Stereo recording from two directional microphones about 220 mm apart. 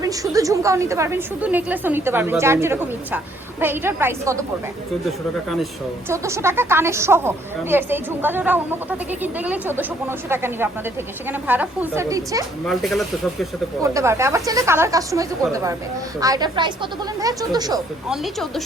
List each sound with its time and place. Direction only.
0.0 s a woman's voice: 15° right (ahead or behind)
6.1 s a woman's voice: 10° right (ahead or behind)
12.6 s speech: centre (ahead or behind)
13.8 s a woman's voice: 15° right (ahead or behind)
18.1 s speech: centre (ahead or behind)